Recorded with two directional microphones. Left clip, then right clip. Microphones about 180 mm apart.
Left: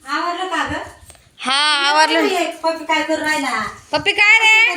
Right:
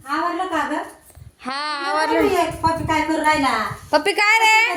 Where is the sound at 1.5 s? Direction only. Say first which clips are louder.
Left 8 dB; 5° left (ahead or behind).